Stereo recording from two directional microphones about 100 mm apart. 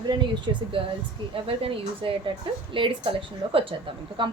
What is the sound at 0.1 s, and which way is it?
Speech, 50° right (ahead or behind).